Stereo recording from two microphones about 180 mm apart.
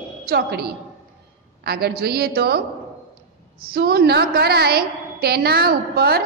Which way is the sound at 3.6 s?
60° right (ahead or behind).